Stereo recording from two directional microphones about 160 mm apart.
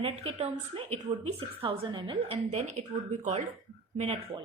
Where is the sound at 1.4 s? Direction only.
30° right (ahead or behind).